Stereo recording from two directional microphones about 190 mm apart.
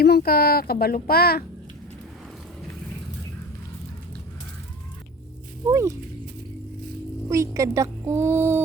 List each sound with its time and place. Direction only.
0.0 s speech: 55° left (ahead or behind)
5.6 s a woman's voice: 15° right (ahead or behind)
7.3 s a woman's voice: 15° right (ahead or behind)